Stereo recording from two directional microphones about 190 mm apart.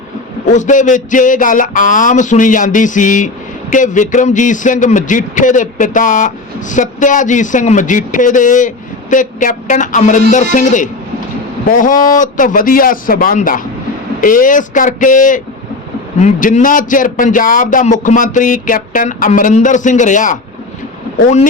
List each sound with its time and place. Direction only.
0.5 s speech: 40° left (ahead or behind)